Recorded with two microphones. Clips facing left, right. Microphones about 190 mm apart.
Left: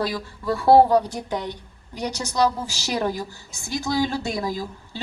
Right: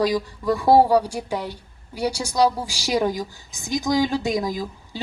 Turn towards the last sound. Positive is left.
turn(degrees=-15)  # may be behind; listen again after turning